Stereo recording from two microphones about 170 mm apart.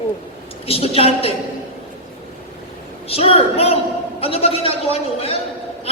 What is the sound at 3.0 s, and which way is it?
A woman's voice, 35° left (ahead or behind).